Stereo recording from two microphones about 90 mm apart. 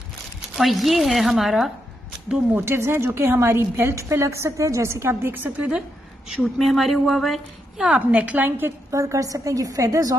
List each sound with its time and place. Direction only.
0.6 s a woman's voice: centre (ahead or behind)
2.5 s a woman's voice: 25° right (ahead or behind); by 8.0 s 5° right (ahead or behind)
8.1 s a woman's voice: 15° right (ahead or behind); by 10.1 s 40° right (ahead or behind)